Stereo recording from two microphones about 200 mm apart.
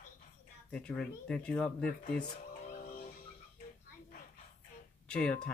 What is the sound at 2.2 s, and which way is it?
Music, 40° left (ahead or behind).